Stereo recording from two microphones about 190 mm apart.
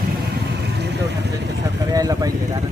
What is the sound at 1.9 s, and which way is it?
Speech, 20° right (ahead or behind).